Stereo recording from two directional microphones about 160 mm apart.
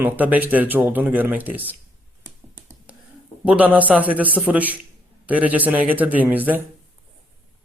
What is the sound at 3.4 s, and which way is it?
Speech, 10° right (ahead or behind).